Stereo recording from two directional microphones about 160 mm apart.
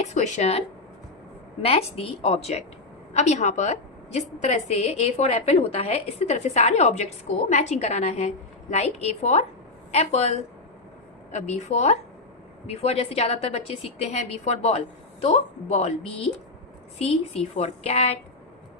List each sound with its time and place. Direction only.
0.0 s a woman's voice: 50° left (ahead or behind)
1.6 s a woman's voice: 35° left (ahead or behind)
17.6 s a woman's voice: 40° left (ahead or behind)